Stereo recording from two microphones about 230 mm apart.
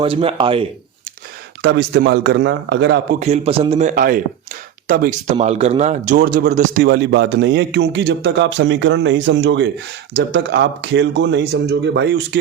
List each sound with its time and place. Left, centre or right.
0.0 s a man's voice: right
1.6 s speech: right
3.2 s a man's voice: right